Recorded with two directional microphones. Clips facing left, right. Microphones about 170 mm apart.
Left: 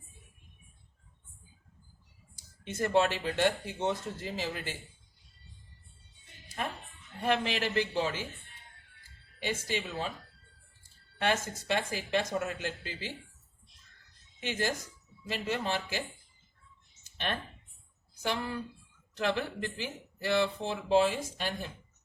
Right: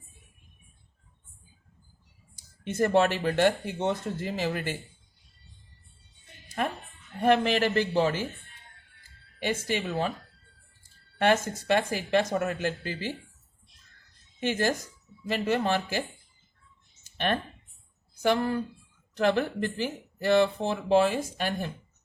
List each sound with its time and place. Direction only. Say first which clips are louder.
2.6 s speech: right 4 dB; 55° right (ahead or behind)
6.6 s music: right 7 dB; 55° right (ahead or behind)
7.2 s speech: right 7 dB; 50° right (ahead or behind)
9.4 s speech: right 5 dB; 55° right (ahead or behind)
11.2 s speech: right 7 dB; 55° right (ahead or behind)
15.3 s speech: right 7 dB; 55° right (ahead or behind)
18.2 s speech: right 9 dB; 50° right (ahead or behind)